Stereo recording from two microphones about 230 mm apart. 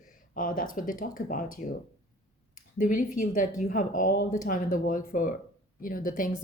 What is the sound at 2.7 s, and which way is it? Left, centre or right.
Speech, left.